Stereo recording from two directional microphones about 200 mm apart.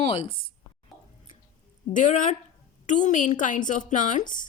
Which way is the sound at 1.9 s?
40° left (ahead or behind).